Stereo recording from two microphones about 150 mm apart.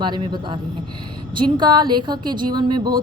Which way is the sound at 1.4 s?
30° right (ahead or behind).